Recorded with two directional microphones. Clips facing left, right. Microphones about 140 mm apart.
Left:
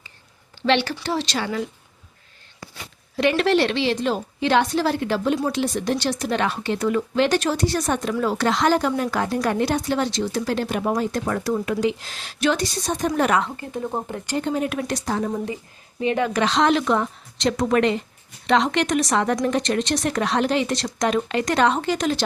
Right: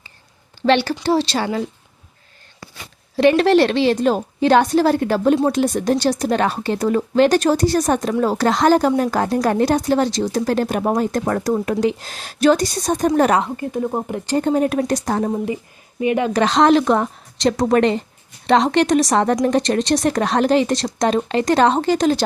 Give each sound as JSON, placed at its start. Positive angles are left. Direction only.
{"t": 0.6, "sound": "speech", "side_deg": -40}
{"t": 3.2, "sound": "speech", "side_deg": -35}
{"t": 13.4, "sound": "speech", "side_deg": -15}
{"t": 14.3, "sound": "speech", "side_deg": -40}
{"t": 16.0, "sound": "speech", "side_deg": -20}
{"t": 16.3, "sound": "speech", "side_deg": -40}